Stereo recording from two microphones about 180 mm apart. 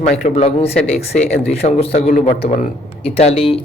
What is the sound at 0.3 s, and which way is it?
Speech, 35° left (ahead or behind).